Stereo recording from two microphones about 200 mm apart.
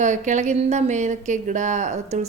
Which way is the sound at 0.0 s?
35° right (ahead or behind).